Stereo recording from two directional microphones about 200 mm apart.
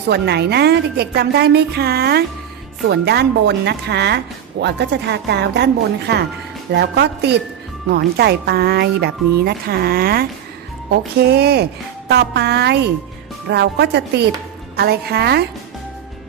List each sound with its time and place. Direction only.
0.1 s a woman's voice: 55° right (ahead or behind)